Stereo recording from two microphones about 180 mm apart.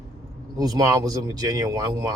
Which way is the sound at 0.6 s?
20° right (ahead or behind).